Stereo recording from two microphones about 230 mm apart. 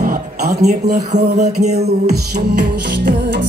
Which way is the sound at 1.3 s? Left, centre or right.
Right.